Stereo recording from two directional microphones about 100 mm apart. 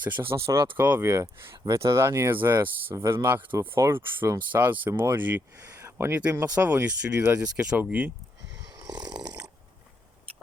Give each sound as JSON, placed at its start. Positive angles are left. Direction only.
{"t": 0.0, "sound": "speech", "side_deg": -20}
{"t": 1.0, "sound": "speech", "side_deg": -30}
{"t": 2.9, "sound": "speech", "side_deg": -30}
{"t": 3.2, "sound": "speech", "side_deg": -20}
{"t": 5.5, "sound": "a sound", "side_deg": -30}
{"t": 6.4, "sound": "speech", "side_deg": -15}